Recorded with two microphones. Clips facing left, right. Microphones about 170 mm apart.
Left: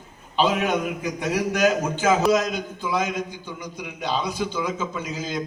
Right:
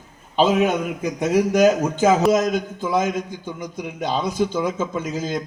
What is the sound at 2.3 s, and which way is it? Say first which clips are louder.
A man's voice: right 3 dB; 45° right (ahead or behind).